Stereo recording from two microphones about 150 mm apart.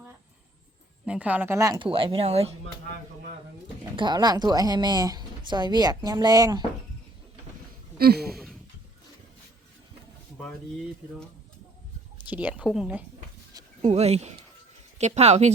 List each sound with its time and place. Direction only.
1.0 s a woman's voice: 10° right (ahead or behind)
1.8 s speech: 35° right (ahead or behind)
3.9 s speech: 30° right (ahead or behind)
7.9 s a sound: 90° right
8.3 s a sound: centre (ahead or behind)
12.1 s speech: 10° right (ahead or behind)
13.8 s speech: 45° right (ahead or behind)